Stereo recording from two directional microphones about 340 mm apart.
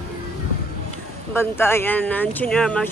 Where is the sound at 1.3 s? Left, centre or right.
Centre.